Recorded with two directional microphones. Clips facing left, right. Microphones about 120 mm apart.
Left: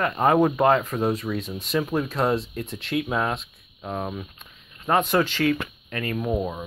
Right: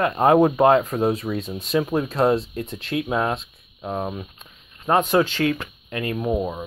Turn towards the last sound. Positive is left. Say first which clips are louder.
# right 2 dB
turn(degrees=-10)  # may be behind; listen again after turning